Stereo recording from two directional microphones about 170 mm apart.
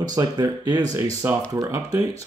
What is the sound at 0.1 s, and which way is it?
Speech, 25° right (ahead or behind).